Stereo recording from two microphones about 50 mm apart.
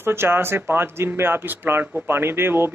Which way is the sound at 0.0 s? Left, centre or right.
Right.